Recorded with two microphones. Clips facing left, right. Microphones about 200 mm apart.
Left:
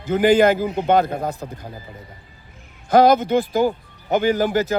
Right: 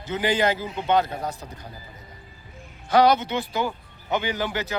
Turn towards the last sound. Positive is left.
turn(degrees=50)  # may be behind; listen again after turning